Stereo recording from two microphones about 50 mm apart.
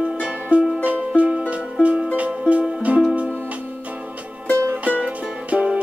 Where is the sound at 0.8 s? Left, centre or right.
Right.